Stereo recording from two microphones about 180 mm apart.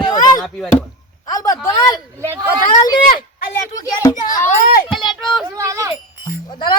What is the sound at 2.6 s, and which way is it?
Speech, 20° left (ahead or behind).